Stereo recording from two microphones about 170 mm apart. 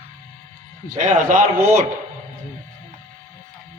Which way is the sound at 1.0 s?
50° right (ahead or behind).